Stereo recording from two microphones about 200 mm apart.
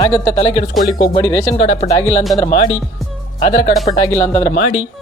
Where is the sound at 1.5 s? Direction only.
30° left (ahead or behind).